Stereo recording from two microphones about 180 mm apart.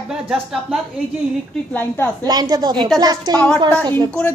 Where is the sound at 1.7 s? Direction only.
15° left (ahead or behind).